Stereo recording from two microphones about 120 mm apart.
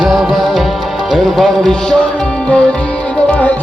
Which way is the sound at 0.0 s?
Centre (ahead or behind).